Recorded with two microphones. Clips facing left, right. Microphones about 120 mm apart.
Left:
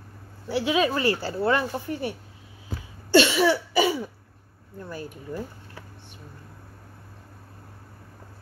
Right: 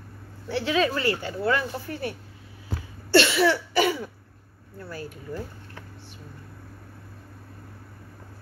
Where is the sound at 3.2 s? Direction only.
15° left (ahead or behind).